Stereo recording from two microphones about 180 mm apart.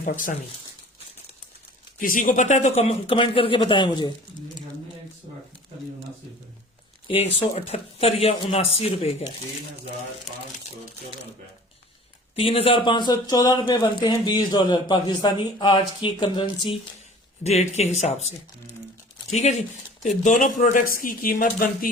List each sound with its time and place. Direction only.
0.0 s speech: 45° left (ahead or behind)
2.0 s speech: 50° left (ahead or behind); by 4.1 s 25° left (ahead or behind)
7.1 s speech: 30° left (ahead or behind)
12.4 s speech: 30° left (ahead or behind); by 21.8 s 50° left (ahead or behind)